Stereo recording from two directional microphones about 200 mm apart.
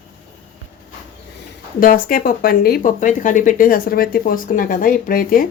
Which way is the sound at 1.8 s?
45° left (ahead or behind).